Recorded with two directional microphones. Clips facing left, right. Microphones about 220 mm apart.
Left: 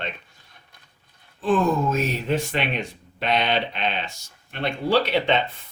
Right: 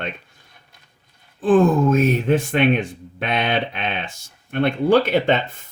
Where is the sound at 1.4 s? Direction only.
50° right (ahead or behind).